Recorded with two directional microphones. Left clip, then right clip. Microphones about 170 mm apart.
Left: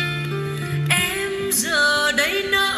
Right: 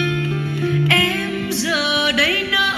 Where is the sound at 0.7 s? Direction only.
15° left (ahead or behind).